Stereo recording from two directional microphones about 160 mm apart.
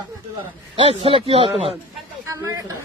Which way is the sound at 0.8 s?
35° right (ahead or behind).